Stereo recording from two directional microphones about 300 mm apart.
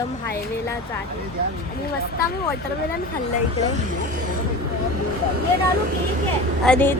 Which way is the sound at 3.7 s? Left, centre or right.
Right.